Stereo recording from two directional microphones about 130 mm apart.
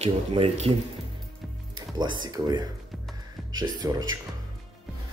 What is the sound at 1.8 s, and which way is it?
Speech, 35° right (ahead or behind).